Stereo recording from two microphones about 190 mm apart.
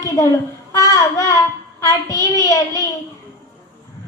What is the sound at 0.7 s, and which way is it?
Singing, 20° left (ahead or behind).